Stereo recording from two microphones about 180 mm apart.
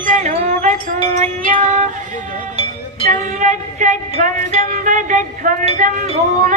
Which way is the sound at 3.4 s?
45° right (ahead or behind).